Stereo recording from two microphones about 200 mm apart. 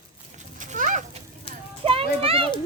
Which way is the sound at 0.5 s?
40° right (ahead or behind).